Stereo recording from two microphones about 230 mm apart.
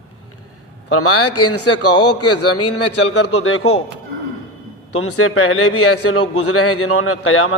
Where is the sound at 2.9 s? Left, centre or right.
Left.